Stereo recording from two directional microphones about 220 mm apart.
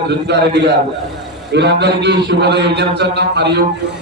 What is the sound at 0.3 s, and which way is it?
A man's voice, 50° right (ahead or behind).